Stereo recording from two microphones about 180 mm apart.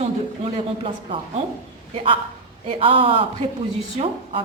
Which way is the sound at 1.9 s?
35° right (ahead or behind).